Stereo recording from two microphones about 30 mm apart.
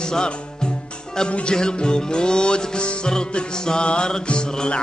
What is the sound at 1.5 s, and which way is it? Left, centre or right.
Music, left.